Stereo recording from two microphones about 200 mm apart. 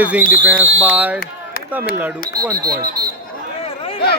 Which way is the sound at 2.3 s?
20° right (ahead or behind).